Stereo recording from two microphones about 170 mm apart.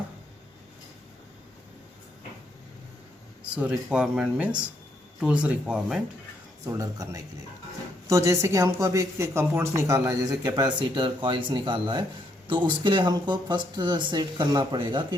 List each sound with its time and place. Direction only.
3.5 s speech: 5° right (ahead or behind)
6.7 s speech: 20° right (ahead or behind)